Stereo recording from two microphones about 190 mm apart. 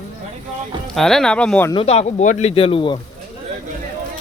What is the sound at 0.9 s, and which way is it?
Speech, centre (ahead or behind).